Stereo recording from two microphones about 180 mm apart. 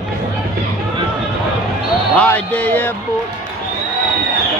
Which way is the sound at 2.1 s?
5° left (ahead or behind).